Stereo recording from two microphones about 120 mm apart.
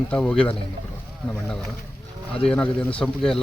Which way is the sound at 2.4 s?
10° left (ahead or behind).